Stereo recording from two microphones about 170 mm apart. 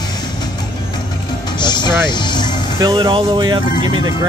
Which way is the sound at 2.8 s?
25° right (ahead or behind).